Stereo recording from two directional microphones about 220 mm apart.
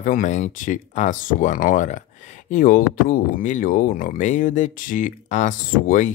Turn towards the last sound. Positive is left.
turn(degrees=35)  # may be behind; listen again after turning